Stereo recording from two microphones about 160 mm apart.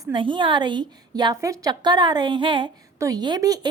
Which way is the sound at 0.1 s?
30° right (ahead or behind).